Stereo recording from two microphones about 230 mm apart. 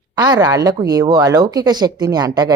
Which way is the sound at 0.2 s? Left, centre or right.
Centre.